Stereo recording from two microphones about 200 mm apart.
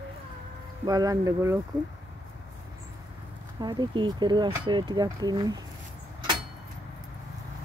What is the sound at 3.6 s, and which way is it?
Speech, 20° right (ahead or behind).